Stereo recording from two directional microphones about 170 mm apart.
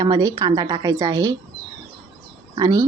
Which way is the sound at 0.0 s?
20° right (ahead or behind).